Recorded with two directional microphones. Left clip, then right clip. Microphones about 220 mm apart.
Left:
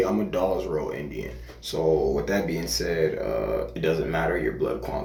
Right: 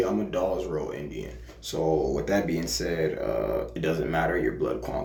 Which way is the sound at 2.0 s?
10° right (ahead or behind).